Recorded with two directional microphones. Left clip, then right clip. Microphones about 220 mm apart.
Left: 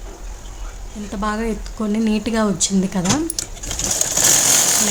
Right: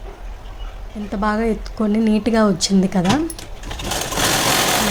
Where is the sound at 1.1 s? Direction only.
5° right (ahead or behind).